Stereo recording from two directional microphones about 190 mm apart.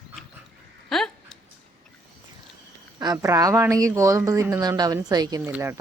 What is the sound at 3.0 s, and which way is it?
A woman's voice, 20° right (ahead or behind).